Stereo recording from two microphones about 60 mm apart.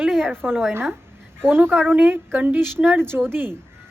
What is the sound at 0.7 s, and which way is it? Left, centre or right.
A woman's voice, right.